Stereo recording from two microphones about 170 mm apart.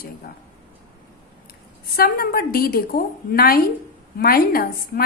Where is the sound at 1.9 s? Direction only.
60° left (ahead or behind).